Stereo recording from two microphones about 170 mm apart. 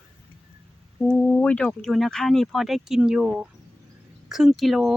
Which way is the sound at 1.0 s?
5° left (ahead or behind).